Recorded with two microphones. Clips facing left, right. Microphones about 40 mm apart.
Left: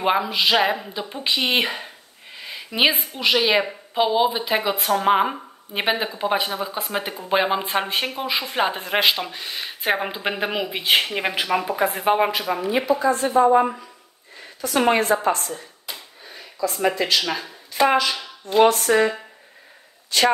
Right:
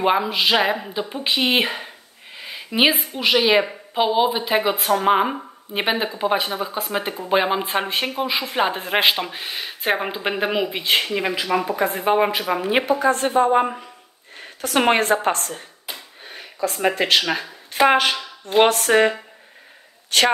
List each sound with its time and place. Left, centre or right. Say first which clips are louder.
0.0 s speech: right 1 dB; centre
2.3 s a sound: right 3 dB; centre
3.2 s speech: right 2 dB; centre
9.6 s speech: even; centre
10.8 s speech: left 5 dB; centre
12.3 s speech: right 1 dB; centre
12.6 s a woman's voice: right 1 dB; right
15.9 s a sound: right 1 dB; right
16.3 s a sound: right 1 dB; right
17.2 s a woman's voice: right 2 dB; right